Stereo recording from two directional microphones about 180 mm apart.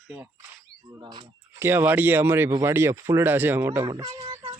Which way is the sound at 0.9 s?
20° right (ahead or behind).